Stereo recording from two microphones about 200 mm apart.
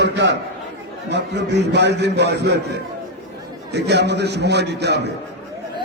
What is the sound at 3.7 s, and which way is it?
A man's voice, 60° right (ahead or behind).